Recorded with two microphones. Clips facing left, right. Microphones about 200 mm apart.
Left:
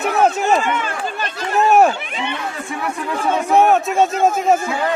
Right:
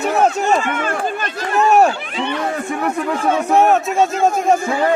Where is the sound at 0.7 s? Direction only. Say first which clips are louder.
Right 2 dB; 50° right (ahead or behind).